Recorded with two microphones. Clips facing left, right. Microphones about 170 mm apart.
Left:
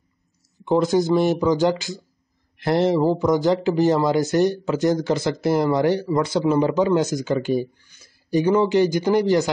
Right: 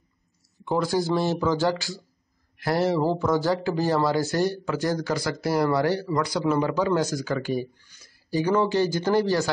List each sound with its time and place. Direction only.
0.7 s speech: 25° left (ahead or behind)